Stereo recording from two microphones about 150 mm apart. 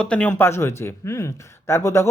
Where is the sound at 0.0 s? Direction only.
10° left (ahead or behind).